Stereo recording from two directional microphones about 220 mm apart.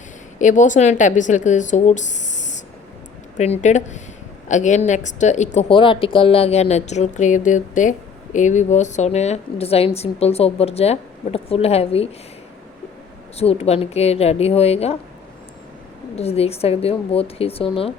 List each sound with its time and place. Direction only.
0.3 s a woman's voice: 35° left (ahead or behind)
13.3 s a woman's voice: 30° left (ahead or behind)
16.1 s a woman's voice: 25° left (ahead or behind)